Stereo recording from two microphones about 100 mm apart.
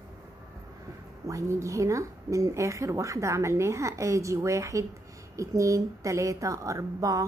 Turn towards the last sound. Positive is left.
turn(degrees=-35)  # may be behind; listen again after turning